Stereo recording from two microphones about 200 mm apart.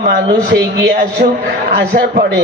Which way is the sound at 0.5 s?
60° right (ahead or behind).